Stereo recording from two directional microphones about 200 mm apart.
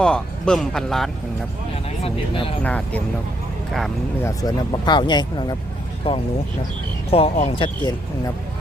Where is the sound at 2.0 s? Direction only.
25° left (ahead or behind).